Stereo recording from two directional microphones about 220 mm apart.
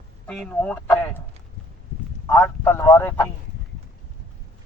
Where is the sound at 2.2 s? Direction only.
10° left (ahead or behind).